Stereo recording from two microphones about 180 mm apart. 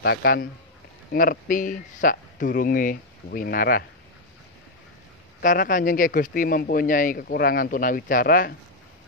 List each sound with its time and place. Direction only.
0.0 s a man's voice: 65° left (ahead or behind)
5.4 s speech: 50° left (ahead or behind)